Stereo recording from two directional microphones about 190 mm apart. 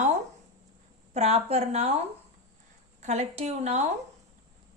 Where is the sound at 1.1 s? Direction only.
35° right (ahead or behind).